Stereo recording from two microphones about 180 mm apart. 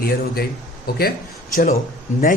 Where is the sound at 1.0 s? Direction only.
55° left (ahead or behind).